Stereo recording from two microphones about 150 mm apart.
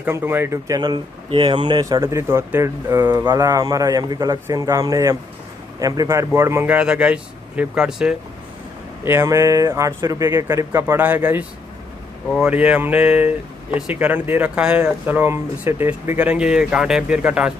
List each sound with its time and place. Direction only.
0.0 s a man's voice: 15° right (ahead or behind)
9.0 s a man's voice: 15° right (ahead or behind)